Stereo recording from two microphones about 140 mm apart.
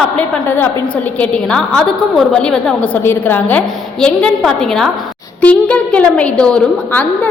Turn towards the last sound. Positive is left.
turn(degrees=10)  # may be behind; listen again after turning